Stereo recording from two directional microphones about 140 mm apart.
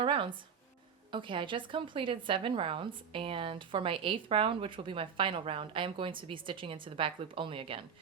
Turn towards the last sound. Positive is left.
turn(degrees=-40)  # may be behind; listen again after turning